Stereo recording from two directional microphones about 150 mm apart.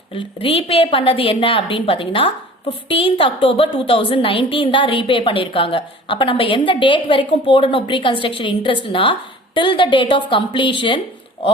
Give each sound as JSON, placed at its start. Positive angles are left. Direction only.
{"t": 0.1, "sound": "a woman's voice", "side_deg": 40}